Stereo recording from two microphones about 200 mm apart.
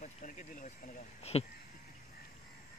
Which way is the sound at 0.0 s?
40° left (ahead or behind).